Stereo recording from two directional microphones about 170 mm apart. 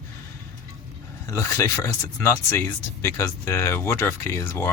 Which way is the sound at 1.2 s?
15° left (ahead or behind).